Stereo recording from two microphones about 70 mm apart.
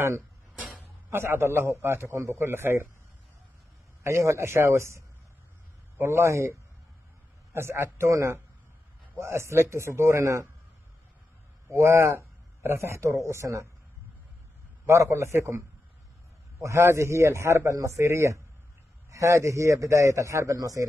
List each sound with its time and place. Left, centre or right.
1.1 s a man's voice: right
4.0 s a man's voice: right
11.7 s a man's voice: right
14.9 s a man's voice: right